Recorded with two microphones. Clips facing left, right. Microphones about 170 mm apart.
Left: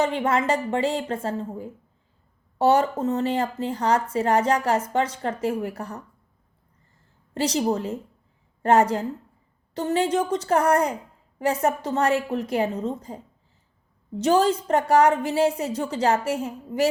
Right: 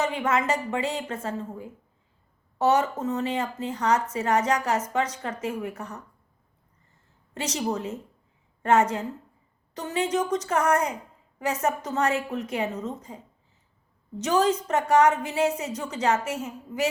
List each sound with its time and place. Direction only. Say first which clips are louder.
0.0 s speech: left 3 dB; 30° left (ahead or behind)
2.6 s speech: left 3 dB; 30° left (ahead or behind)
7.3 s speech: left 5 dB; 30° left (ahead or behind)
14.2 s speech: left 3 dB; 30° left (ahead or behind)